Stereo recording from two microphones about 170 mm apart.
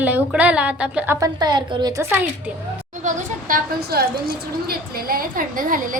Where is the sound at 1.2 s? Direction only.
25° right (ahead or behind).